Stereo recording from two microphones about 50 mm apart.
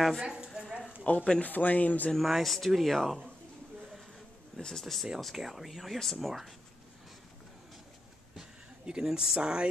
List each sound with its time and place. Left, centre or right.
0.2 s a woman's voice: centre
0.6 s a sound: centre
1.0 s speech: left
2.1 s speech: centre
4.6 s speech: centre
5.2 s speech: centre
8.4 s speech: centre